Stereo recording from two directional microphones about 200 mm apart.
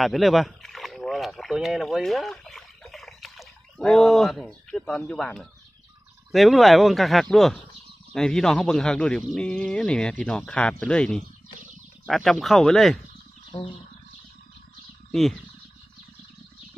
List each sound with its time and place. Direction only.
0.0 s speech: centre (ahead or behind)
13.5 s a sound: 25° left (ahead or behind)
15.0 s speech: centre (ahead or behind)